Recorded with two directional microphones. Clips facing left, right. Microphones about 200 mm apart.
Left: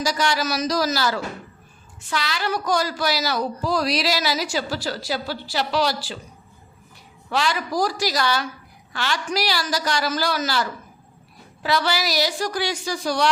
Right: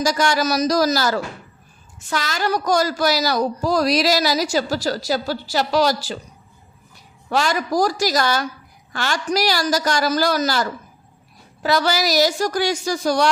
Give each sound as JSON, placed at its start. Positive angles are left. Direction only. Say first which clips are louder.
{"t": 0.0, "sound": "a woman's voice", "louder": "right 4 dB", "side_deg": -45}
{"t": 7.3, "sound": "a woman's voice", "louder": "right 4 dB", "side_deg": -45}